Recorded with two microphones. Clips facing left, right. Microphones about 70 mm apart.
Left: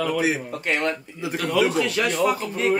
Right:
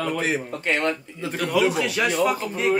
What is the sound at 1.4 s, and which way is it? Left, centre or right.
Speech, centre.